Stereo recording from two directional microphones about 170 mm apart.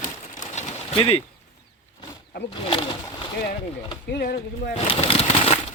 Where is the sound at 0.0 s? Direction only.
45° left (ahead or behind).